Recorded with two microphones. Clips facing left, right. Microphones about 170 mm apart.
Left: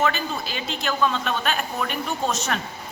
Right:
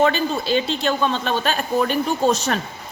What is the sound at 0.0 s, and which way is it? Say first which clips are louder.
A woman's voice: right 6 dB; 30° right (ahead or behind).